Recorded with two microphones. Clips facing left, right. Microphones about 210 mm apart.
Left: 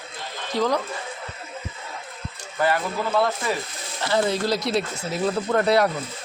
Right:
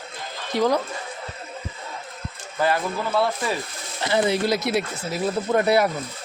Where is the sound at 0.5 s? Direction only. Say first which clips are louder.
Right 2 dB; 15° right (ahead or behind).